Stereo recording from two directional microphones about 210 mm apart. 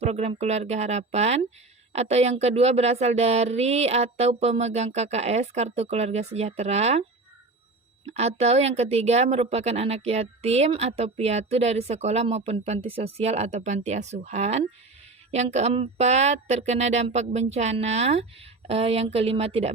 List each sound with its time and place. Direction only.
0.0 s a woman's voice: 30° right (ahead or behind)
8.0 s a woman's voice: 30° right (ahead or behind)